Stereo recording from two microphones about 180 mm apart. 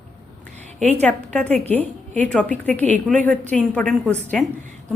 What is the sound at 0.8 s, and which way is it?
Speech, 40° right (ahead or behind).